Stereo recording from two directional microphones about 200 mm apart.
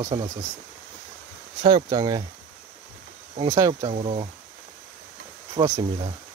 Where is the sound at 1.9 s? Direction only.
20° right (ahead or behind).